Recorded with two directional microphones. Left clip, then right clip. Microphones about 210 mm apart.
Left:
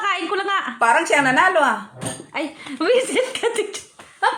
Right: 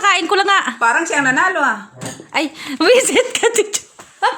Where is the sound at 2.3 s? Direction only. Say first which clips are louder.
Right 9 dB; 50° right (ahead or behind).